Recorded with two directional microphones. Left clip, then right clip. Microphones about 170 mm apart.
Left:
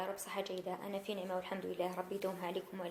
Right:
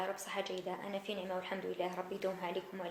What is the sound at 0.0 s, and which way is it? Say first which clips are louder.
A woman's voice: right 2 dB; 20° left (ahead or behind).